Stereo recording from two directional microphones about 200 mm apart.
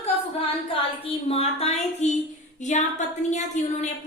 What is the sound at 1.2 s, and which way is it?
A woman's voice, 30° left (ahead or behind).